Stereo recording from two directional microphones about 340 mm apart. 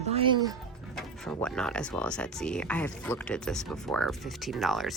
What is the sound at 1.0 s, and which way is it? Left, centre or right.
Speech, centre.